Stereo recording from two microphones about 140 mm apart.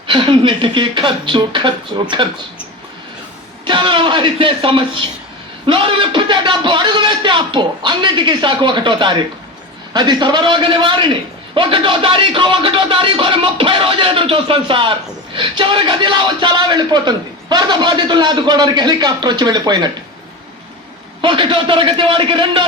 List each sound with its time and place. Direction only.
0.1 s a man's voice: 35° right (ahead or behind)
3.6 s a sound: 35° right (ahead or behind)
5.6 s a man's voice: 35° right (ahead or behind)
21.2 s a man's voice: 35° right (ahead or behind)